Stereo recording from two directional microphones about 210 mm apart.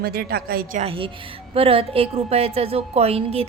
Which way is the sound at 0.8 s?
25° right (ahead or behind).